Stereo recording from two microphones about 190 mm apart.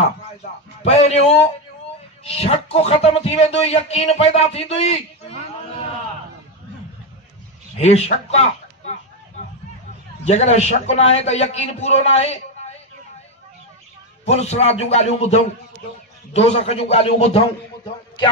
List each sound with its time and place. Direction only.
0.8 s speech: 35° left (ahead or behind)
7.8 s speech: 35° left (ahead or behind)
10.2 s speech: 35° left (ahead or behind)
14.2 s speech: 35° left (ahead or behind)